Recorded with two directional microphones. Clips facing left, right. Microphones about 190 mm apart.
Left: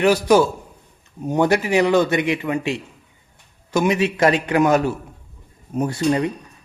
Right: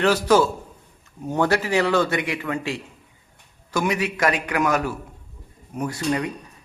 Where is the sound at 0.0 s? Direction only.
15° left (ahead or behind).